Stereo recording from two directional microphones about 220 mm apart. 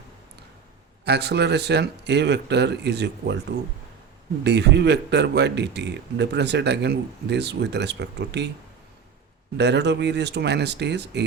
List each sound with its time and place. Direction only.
1.0 s speech: 50° right (ahead or behind)
4.4 s speech: 50° right (ahead or behind)
9.6 s speech: 50° right (ahead or behind)